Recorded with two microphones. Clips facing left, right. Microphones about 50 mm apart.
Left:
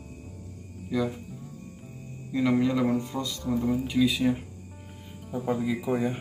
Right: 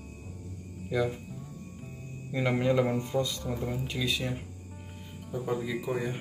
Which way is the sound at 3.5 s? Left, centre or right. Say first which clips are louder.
Left 7 dB; centre.